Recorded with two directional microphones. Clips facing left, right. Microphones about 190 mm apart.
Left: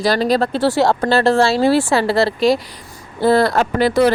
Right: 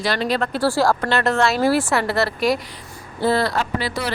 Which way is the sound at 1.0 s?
30° left (ahead or behind).